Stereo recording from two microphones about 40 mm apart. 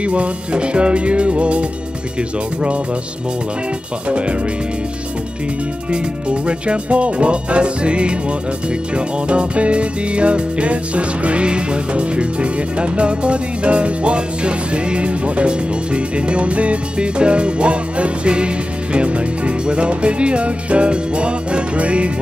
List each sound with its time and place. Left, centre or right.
0.0 s music: right
5.9 s music: right